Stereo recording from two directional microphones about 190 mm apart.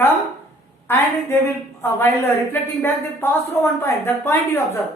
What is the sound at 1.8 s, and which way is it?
Speech, 10° left (ahead or behind).